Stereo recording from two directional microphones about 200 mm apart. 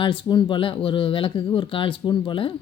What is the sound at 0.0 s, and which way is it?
Speech, 25° left (ahead or behind).